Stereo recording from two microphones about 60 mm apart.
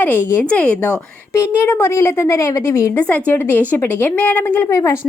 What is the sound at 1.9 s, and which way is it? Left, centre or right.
A woman's voice, left.